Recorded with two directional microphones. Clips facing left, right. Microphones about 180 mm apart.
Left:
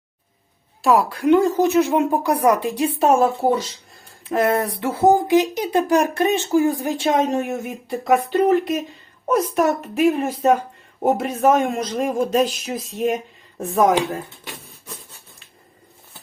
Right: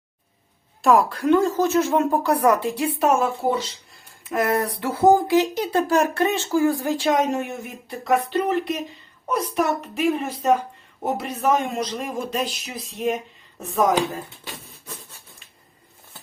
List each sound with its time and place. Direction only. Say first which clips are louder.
0.8 s a woman's voice: even; 5° left (ahead or behind); by 12.8 s 45° left (ahead or behind)